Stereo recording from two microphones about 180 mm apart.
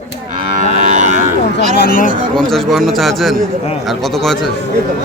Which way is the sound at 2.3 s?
Centre (ahead or behind).